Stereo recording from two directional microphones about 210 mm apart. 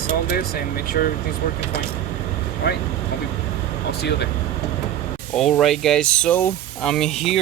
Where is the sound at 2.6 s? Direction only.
55° left (ahead or behind).